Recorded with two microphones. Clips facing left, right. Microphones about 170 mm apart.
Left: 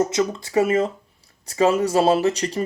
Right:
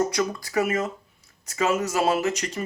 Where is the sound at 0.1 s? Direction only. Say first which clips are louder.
Left 4 dB; 25° left (ahead or behind).